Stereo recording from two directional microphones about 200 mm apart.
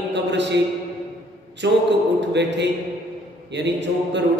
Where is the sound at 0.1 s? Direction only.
60° right (ahead or behind).